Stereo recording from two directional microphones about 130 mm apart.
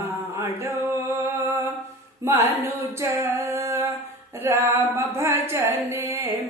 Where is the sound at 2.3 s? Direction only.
20° right (ahead or behind).